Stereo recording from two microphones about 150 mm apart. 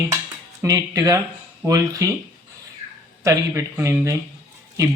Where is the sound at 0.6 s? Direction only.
20° right (ahead or behind).